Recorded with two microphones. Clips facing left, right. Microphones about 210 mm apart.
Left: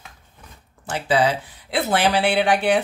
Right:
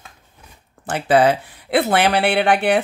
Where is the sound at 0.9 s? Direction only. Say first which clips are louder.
Right 5 dB; 55° right (ahead or behind).